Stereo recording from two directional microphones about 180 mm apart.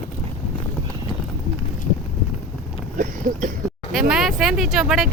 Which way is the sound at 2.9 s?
45° right (ahead or behind).